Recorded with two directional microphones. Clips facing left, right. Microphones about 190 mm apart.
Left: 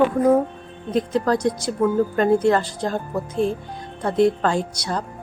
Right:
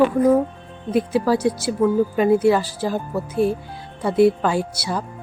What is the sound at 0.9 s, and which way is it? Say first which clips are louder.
Speech: right 2 dB; 10° right (ahead or behind).